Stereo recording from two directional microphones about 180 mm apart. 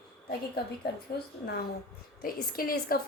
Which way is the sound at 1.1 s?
65° left (ahead or behind).